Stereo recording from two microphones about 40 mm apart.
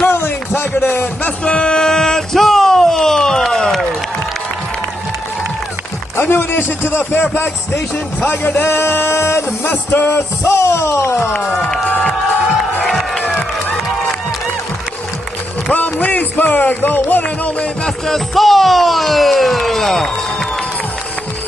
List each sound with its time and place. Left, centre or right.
0.1 s a sound: left
1.4 s music: left
2.3 s a sound: centre
6.3 s a man's voice: left
8.6 s a sound: left
11.4 s speech: centre
12.8 s music: centre
15.7 s speech: left
17.8 s speech: centre